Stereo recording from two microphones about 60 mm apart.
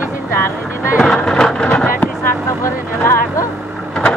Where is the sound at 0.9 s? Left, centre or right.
Centre.